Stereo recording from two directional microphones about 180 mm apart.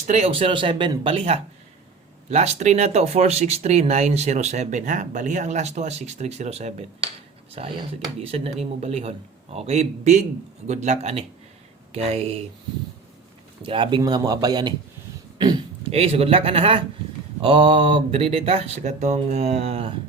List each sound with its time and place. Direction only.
0.1 s speech: 35° right (ahead or behind)
13.6 s speech: 30° right (ahead or behind)
15.9 s speech: 35° right (ahead or behind)